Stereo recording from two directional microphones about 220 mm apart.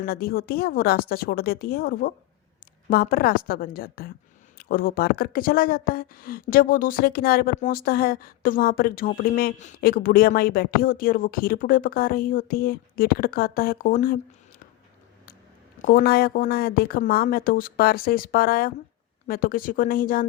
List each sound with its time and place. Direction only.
0.0 s speech: 45° left (ahead or behind)
15.8 s speech: 40° left (ahead or behind)